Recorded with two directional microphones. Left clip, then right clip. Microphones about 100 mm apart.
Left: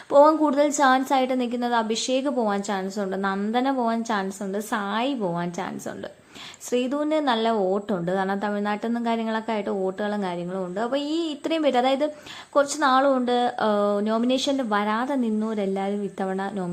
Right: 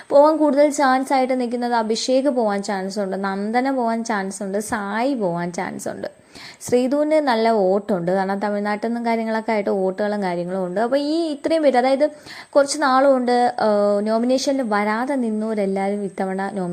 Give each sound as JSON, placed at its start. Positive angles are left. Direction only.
{"t": 0.1, "sound": "a woman's voice", "side_deg": -25}
{"t": 6.7, "sound": "a woman's voice", "side_deg": -35}
{"t": 12.5, "sound": "a woman's voice", "side_deg": -40}